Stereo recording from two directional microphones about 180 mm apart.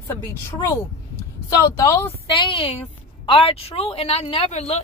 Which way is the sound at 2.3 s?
25° left (ahead or behind).